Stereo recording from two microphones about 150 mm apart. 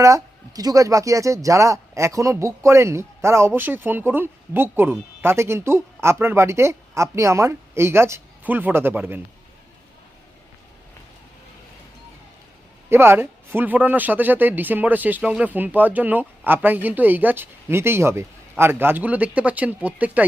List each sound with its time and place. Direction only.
0.0 s speech: 20° right (ahead or behind)
12.9 s speech: 15° right (ahead or behind)